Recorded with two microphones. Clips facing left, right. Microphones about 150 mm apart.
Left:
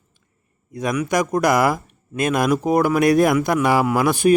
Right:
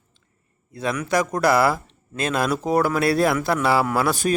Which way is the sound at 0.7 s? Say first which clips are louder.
Left 2 dB; 15° left (ahead or behind).